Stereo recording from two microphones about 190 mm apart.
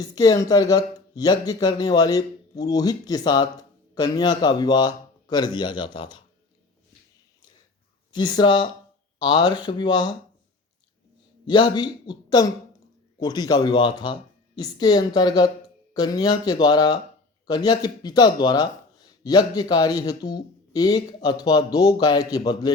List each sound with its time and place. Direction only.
0.0 s speech: 20° left (ahead or behind)
8.1 s speech: 25° left (ahead or behind)
11.4 s speech: 25° left (ahead or behind)